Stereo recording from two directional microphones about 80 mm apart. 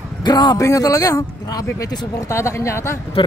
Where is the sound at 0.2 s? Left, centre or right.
Left.